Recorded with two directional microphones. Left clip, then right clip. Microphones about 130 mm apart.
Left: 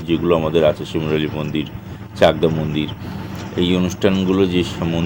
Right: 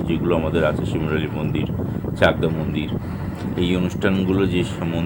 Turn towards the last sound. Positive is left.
turn(degrees=25)  # may be behind; listen again after turning